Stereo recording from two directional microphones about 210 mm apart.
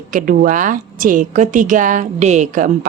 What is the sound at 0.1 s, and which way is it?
A woman's voice, 40° right (ahead or behind).